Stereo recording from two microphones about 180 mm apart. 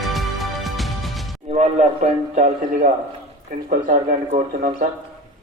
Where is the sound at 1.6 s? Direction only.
40° right (ahead or behind).